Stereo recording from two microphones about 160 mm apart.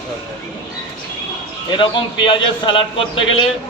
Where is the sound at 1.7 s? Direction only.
30° left (ahead or behind).